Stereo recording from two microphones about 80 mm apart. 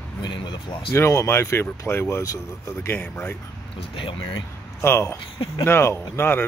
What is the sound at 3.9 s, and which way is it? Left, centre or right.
Speech, left.